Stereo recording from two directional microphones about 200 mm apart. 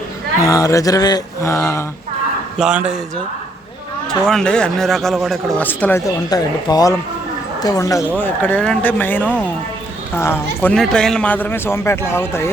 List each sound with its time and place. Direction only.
0.4 s speech: 15° left (ahead or behind)
2.6 s a man's voice: 5° right (ahead or behind)
4.1 s a man's voice: 5° left (ahead or behind)